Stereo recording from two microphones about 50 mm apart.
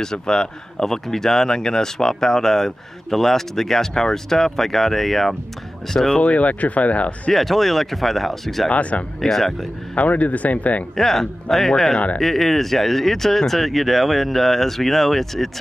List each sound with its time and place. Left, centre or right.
0.0 s speech: centre
6.1 s speech: left
7.3 s speech: centre
8.6 s speech: left
9.2 s speech: centre
9.9 s speech: left
11.0 s speech: centre